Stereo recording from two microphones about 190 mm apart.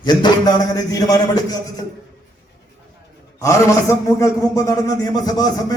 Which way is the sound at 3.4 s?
15° left (ahead or behind).